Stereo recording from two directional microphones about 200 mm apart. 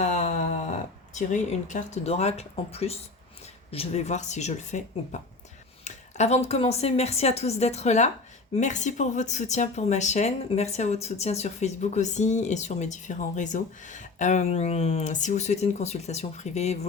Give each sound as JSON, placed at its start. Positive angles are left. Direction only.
{"t": 0.0, "sound": "speech", "side_deg": 35}